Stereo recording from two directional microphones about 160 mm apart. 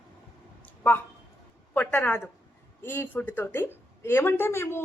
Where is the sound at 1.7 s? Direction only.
10° left (ahead or behind).